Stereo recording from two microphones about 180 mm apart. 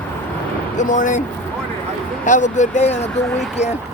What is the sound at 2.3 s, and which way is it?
Speech, 40° left (ahead or behind).